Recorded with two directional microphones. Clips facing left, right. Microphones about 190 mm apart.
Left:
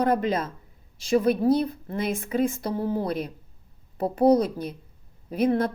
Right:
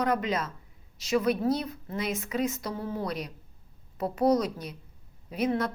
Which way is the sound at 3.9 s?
30° left (ahead or behind).